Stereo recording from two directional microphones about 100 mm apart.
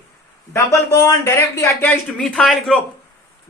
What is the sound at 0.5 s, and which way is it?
Speech, 30° left (ahead or behind).